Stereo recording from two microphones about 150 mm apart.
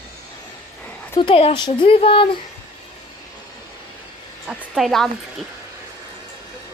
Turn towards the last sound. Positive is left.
turn(degrees=0)  # may be behind; listen again after turning